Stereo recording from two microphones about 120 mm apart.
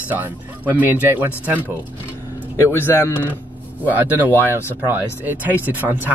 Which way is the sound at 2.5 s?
20° left (ahead or behind).